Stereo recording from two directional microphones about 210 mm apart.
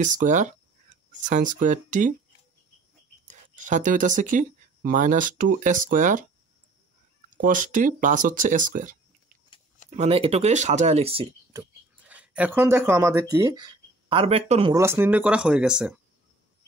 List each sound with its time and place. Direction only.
0.0 s speech: 35° right (ahead or behind)
3.3 s speech: 35° right (ahead or behind)
7.4 s speech: 40° right (ahead or behind)
11.5 s speech: 5° right (ahead or behind); by 14.7 s 30° right (ahead or behind)
14.7 s speech: 10° right (ahead or behind)